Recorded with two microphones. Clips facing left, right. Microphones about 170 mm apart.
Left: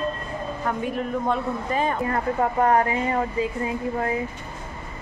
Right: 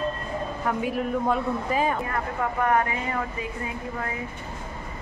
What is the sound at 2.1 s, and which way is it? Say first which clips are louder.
Speech: left 5 dB; 35° left (ahead or behind).